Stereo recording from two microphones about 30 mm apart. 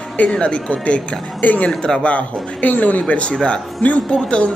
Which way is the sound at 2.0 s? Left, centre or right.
Left.